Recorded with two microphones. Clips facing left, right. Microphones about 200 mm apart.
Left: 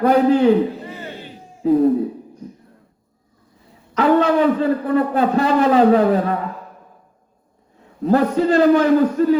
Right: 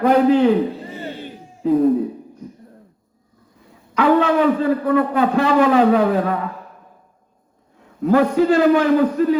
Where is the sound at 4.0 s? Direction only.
40° left (ahead or behind).